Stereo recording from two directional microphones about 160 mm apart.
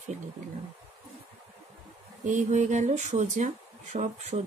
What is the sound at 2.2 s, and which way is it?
Speech, 50° right (ahead or behind).